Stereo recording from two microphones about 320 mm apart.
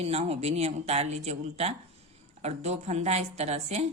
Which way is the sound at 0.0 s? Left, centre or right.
Centre.